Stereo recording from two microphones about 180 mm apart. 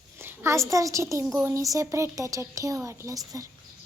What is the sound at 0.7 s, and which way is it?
Speech, 15° right (ahead or behind).